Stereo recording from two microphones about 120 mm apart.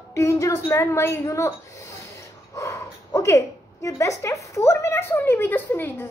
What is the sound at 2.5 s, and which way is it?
Speech, 25° left (ahead or behind).